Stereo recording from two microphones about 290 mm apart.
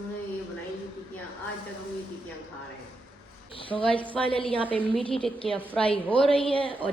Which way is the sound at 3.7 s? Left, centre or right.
Centre.